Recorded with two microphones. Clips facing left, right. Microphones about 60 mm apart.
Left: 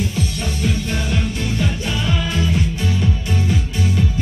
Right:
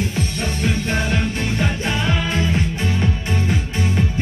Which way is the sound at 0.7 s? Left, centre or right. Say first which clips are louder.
Right 2 dB; right.